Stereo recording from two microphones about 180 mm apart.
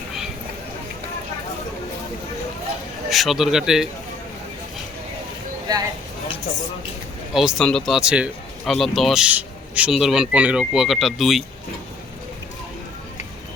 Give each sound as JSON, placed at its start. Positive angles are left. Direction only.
{"t": 3.1, "sound": "speech", "side_deg": 0}
{"t": 5.7, "sound": "a sound", "side_deg": -20}
{"t": 7.3, "sound": "speech", "side_deg": 0}